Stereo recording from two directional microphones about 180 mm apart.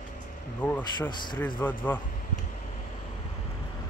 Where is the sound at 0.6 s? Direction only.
10° left (ahead or behind).